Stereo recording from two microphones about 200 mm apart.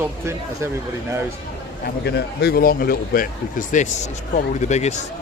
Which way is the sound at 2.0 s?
55° left (ahead or behind).